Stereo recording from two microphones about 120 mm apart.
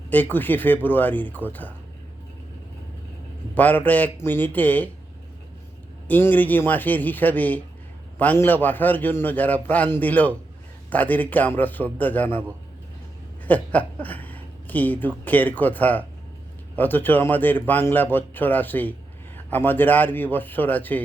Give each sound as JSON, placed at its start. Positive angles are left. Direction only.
{"t": 0.1, "sound": "a man's voice", "side_deg": 15}
{"t": 3.5, "sound": "a man's voice", "side_deg": 15}
{"t": 6.1, "sound": "a man's voice", "side_deg": 15}
{"t": 13.4, "sound": "a woman's voice", "side_deg": 15}